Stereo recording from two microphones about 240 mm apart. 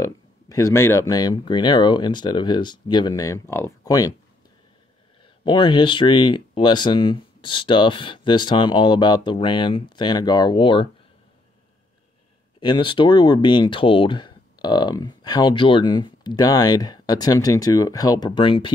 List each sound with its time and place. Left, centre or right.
0.0 s speech: centre
5.4 s speech: centre
12.5 s speech: centre